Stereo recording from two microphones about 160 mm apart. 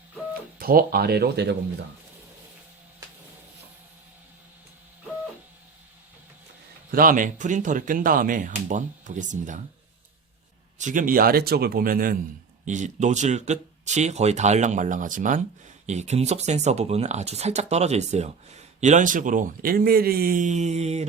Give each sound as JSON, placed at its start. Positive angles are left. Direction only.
{"t": 0.6, "sound": "speech", "side_deg": -70}
{"t": 6.9, "sound": "speech", "side_deg": -60}
{"t": 10.8, "sound": "speech", "side_deg": -55}
{"t": 12.6, "sound": "speech", "side_deg": -50}
{"t": 15.9, "sound": "speech", "side_deg": -45}